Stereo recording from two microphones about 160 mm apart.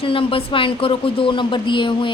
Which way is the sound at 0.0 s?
35° left (ahead or behind).